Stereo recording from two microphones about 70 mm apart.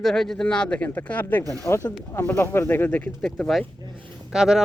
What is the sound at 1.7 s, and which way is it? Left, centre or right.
Speech, left.